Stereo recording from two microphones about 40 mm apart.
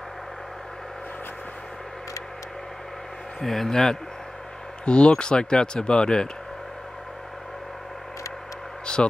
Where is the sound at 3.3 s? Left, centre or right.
Centre.